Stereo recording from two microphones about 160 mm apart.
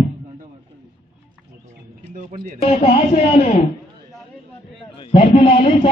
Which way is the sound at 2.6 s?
40° left (ahead or behind).